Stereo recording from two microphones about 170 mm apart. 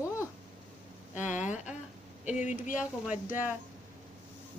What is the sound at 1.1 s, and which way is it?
Speech, 45° left (ahead or behind).